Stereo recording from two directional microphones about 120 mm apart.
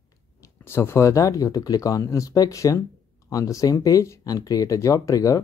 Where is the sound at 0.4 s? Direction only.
20° left (ahead or behind).